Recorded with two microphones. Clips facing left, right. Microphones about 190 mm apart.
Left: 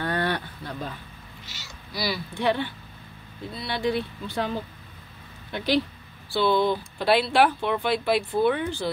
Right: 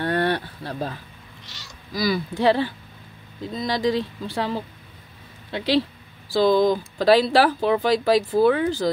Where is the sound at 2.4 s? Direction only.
90° right.